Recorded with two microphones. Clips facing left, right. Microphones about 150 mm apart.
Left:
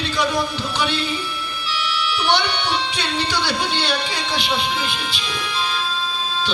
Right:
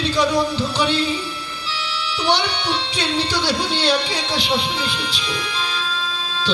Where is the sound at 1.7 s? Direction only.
30° right (ahead or behind).